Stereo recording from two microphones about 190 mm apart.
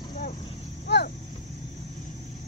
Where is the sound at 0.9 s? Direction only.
60° left (ahead or behind).